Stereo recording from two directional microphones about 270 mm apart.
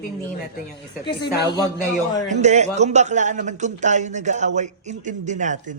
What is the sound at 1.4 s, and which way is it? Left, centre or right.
Speech, centre.